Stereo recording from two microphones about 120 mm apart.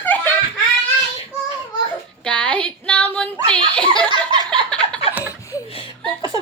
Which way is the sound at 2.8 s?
10° left (ahead or behind).